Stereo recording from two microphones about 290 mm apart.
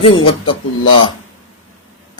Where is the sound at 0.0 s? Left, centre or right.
Centre.